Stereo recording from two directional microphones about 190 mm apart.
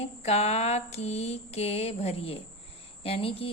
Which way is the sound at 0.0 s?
35° left (ahead or behind).